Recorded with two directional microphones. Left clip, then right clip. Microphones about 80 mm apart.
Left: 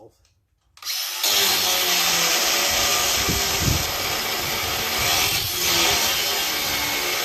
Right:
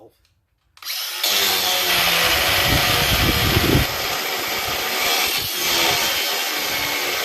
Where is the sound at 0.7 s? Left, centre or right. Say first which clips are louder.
Right 1 dB; centre.